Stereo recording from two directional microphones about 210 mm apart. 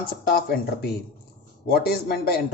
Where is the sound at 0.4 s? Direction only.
50° left (ahead or behind).